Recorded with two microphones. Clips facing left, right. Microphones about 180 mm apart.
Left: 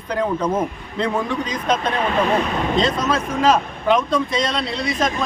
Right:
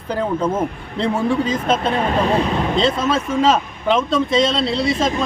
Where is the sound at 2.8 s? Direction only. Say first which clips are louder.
Right 1 dB; 25° right (ahead or behind).